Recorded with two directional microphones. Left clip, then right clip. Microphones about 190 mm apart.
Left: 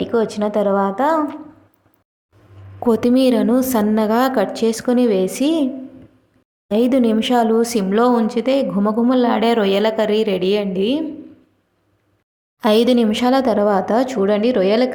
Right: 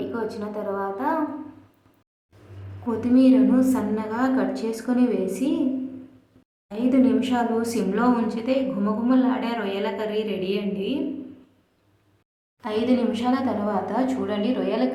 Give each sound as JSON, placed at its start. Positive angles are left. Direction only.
{"t": 0.0, "sound": "a woman's voice", "side_deg": 40}
{"t": 2.8, "sound": "speech", "side_deg": 50}
{"t": 6.7, "sound": "speech", "side_deg": 45}
{"t": 12.5, "sound": "speech", "side_deg": 50}